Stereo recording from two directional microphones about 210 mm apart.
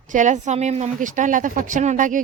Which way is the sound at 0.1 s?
35° right (ahead or behind).